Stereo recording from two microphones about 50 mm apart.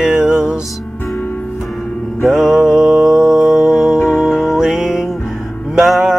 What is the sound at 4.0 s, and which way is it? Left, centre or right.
Music, left.